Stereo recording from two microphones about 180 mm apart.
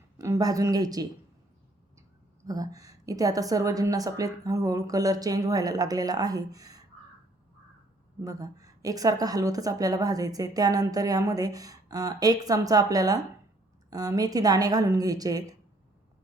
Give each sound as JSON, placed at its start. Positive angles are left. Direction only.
{"t": 0.2, "sound": "a woman's voice", "side_deg": -20}
{"t": 8.2, "sound": "a woman's voice", "side_deg": -20}